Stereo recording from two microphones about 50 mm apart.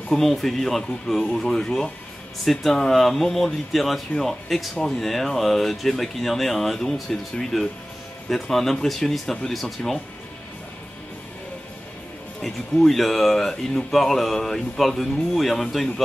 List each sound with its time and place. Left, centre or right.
0.1 s speech: centre
12.4 s speech: centre